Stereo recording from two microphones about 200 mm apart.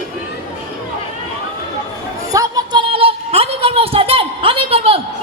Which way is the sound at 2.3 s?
20° right (ahead or behind).